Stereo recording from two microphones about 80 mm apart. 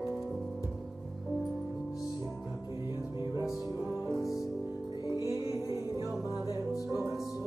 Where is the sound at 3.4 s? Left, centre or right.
Centre.